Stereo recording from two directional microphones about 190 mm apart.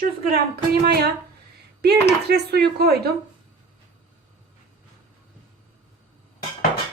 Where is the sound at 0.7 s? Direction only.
55° right (ahead or behind).